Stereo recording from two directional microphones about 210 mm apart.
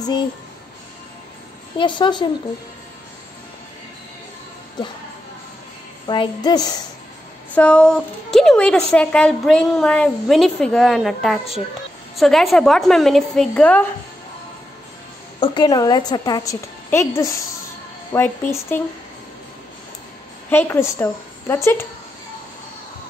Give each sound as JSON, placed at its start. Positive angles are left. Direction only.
{"t": 1.8, "sound": "a woman's voice", "side_deg": 20}
{"t": 6.0, "sound": "a woman's voice", "side_deg": 20}
{"t": 7.5, "sound": "a woman's voice", "side_deg": 5}
{"t": 15.4, "sound": "a woman's voice", "side_deg": 20}
{"t": 20.4, "sound": "a woman's voice", "side_deg": 10}